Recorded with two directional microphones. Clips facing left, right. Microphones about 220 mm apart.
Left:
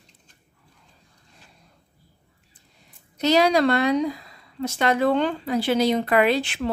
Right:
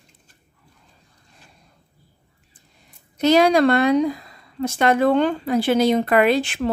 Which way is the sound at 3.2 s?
50° right (ahead or behind).